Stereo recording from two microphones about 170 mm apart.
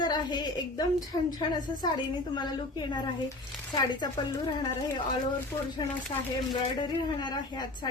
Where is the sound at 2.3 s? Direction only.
25° left (ahead or behind).